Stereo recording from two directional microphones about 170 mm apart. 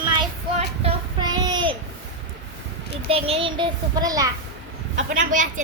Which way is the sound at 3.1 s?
35° right (ahead or behind).